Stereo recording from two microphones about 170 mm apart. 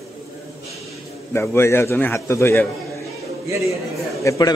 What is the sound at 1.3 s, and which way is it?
A man's voice, 15° left (ahead or behind).